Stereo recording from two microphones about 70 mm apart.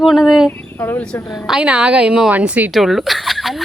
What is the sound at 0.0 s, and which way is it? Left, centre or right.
Speech, centre.